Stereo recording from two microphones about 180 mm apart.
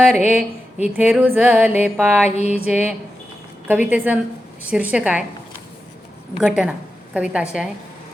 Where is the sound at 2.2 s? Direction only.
35° left (ahead or behind).